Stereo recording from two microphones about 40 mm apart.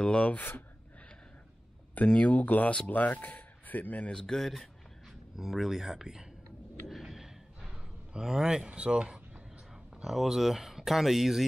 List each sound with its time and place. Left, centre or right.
0.0 s speech: left
0.4 s speech: left
2.1 s speech: left
4.1 s speech: centre
5.3 s speech: centre
6.9 s a sound: centre
8.6 s speech: right
10.0 s speech: centre